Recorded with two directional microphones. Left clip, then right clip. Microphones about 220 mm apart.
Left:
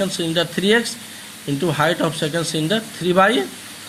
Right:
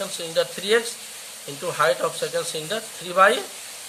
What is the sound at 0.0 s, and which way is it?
Speech, 15° left (ahead or behind).